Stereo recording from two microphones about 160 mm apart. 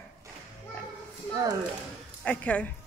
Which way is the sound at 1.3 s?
25° right (ahead or behind).